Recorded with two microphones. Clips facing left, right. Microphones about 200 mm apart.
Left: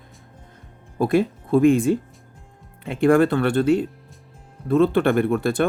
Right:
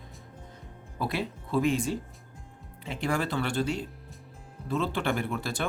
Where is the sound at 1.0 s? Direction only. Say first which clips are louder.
Left 12 dB; 50° left (ahead or behind).